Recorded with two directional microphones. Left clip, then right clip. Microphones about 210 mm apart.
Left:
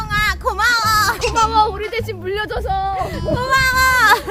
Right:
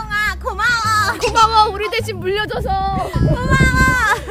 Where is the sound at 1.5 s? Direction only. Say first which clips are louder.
Right 2 dB; 40° right (ahead or behind).